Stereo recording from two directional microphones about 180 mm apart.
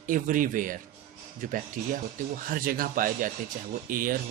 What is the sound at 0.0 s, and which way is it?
Speech, 50° right (ahead or behind).